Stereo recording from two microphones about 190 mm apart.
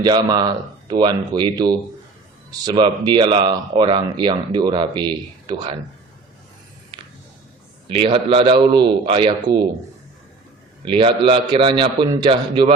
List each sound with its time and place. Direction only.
0.0 s speech: 20° right (ahead or behind)
7.9 s speech: 25° right (ahead or behind)
10.8 s speech: 25° right (ahead or behind)